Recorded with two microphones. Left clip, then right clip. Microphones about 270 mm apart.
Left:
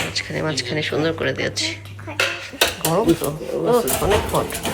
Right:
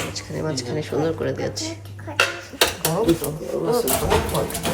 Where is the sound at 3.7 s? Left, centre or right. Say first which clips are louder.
Left 3 dB; centre.